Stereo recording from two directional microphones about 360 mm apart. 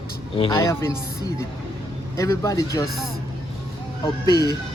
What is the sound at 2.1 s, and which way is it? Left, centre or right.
Speech, centre.